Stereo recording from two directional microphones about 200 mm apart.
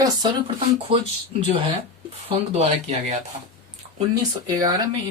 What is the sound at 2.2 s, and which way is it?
Speech, 30° right (ahead or behind).